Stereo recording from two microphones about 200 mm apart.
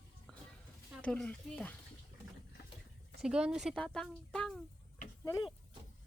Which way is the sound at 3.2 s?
5° right (ahead or behind).